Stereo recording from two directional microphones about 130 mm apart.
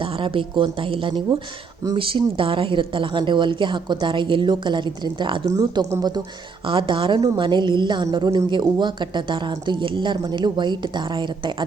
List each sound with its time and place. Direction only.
0.0 s a woman's voice: 40° right (ahead or behind)
5.5 s a woman's voice: 25° right (ahead or behind)